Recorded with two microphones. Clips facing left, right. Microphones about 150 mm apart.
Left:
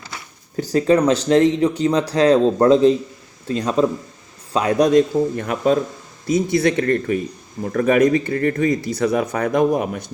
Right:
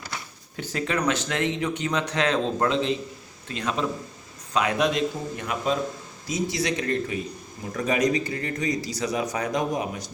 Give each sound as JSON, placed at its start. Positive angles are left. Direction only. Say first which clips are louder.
{"t": 0.5, "sound": "speech", "louder": "left 12 dB", "side_deg": 40}